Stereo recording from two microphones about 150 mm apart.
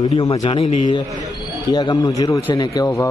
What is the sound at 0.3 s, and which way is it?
A man's voice, 40° left (ahead or behind).